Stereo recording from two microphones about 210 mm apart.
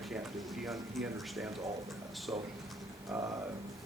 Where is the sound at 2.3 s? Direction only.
15° right (ahead or behind).